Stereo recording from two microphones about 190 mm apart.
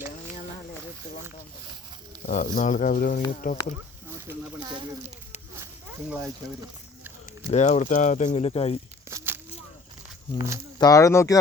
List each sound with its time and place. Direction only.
2.2 s speech: 45° left (ahead or behind)
6.1 s speech: centre (ahead or behind)
7.5 s speech: 35° left (ahead or behind)
9.0 s a sound: 15° right (ahead or behind)
10.3 s speech: 15° right (ahead or behind)
10.8 s speech: 20° left (ahead or behind)